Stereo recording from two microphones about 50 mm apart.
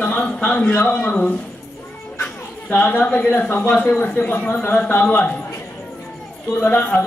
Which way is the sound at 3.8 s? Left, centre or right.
Left.